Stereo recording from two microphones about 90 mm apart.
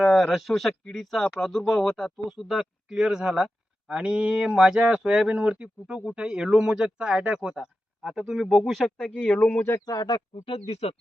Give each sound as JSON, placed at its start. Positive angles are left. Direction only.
{"t": 0.0, "sound": "speech", "side_deg": 0}
{"t": 9.8, "sound": "speech", "side_deg": 45}
{"t": 10.3, "sound": "speech", "side_deg": 90}